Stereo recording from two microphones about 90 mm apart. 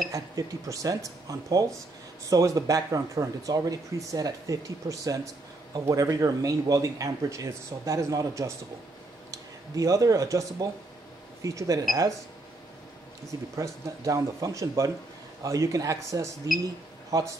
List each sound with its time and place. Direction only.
0.1 s speech: 40° right (ahead or behind)
13.3 s speech: 35° right (ahead or behind)